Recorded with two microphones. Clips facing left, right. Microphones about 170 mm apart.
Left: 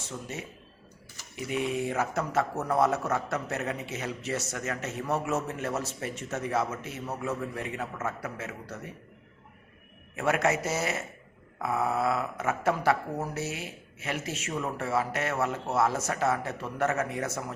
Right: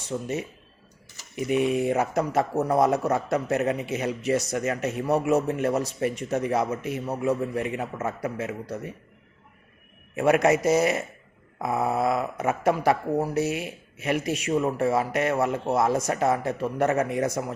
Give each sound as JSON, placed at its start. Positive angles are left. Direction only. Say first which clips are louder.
{"t": 0.1, "sound": "speech", "louder": "right 9 dB", "side_deg": -25}
{"t": 1.5, "sound": "a man's voice", "louder": "right 7 dB", "side_deg": -15}
{"t": 2.4, "sound": "a man's voice", "louder": "right 4 dB", "side_deg": -35}
{"t": 3.1, "sound": "a man's voice", "louder": "right 6 dB", "side_deg": -15}
{"t": 10.2, "sound": "a man's voice", "louder": "right 7 dB", "side_deg": -15}